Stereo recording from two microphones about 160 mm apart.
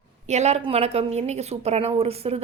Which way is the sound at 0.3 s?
45° right (ahead or behind).